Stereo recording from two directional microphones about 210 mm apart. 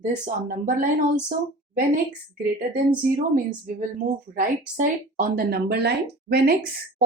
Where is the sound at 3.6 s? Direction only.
40° right (ahead or behind).